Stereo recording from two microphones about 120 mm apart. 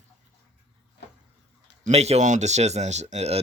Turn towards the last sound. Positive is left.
turn(degrees=-60)  # may be behind; listen again after turning